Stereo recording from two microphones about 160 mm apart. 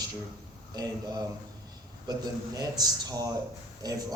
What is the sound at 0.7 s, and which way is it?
Speech, 25° right (ahead or behind).